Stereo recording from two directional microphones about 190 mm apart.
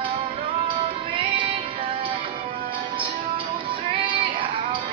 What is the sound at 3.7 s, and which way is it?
Music, 25° right (ahead or behind).